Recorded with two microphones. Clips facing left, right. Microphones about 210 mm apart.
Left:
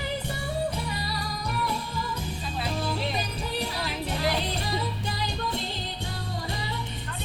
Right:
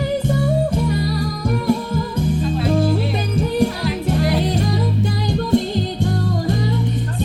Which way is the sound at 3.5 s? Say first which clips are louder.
Right 11 dB; 50° right (ahead or behind).